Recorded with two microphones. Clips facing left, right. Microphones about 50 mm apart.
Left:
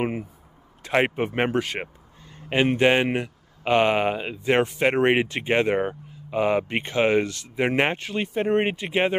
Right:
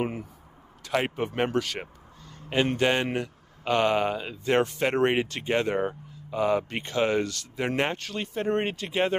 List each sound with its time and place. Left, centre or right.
0.0 s a man's voice: left